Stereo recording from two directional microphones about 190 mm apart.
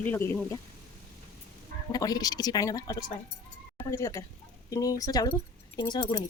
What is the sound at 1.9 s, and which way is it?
Speech, 20° left (ahead or behind).